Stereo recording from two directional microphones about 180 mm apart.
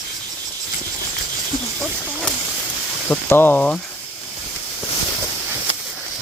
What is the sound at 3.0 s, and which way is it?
Speech, 10° left (ahead or behind).